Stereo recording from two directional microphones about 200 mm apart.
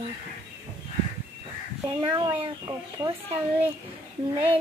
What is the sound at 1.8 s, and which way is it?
Speech, 25° right (ahead or behind).